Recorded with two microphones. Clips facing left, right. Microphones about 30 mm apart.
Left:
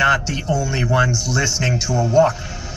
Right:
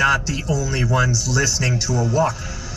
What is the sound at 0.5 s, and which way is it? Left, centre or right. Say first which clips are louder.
A woman's voice: left 2 dB; left.